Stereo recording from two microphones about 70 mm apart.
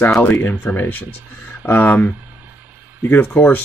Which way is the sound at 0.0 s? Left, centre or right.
Left.